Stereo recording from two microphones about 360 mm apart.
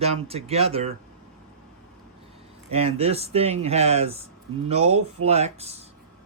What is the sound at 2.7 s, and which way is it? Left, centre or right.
A man's voice, centre.